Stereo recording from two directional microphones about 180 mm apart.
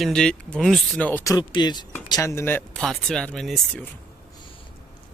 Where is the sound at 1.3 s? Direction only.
25° left (ahead or behind); by 3.9 s 5° left (ahead or behind).